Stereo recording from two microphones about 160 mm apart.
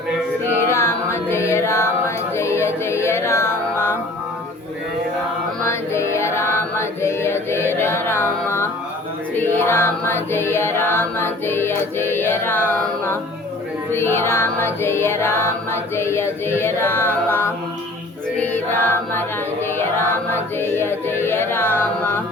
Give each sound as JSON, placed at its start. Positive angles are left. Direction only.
{"t": 0.7, "sound": "music", "side_deg": 15}
{"t": 5.6, "sound": "music", "side_deg": 15}
{"t": 18.3, "sound": "choir", "side_deg": 10}
{"t": 20.1, "sound": "music", "side_deg": 15}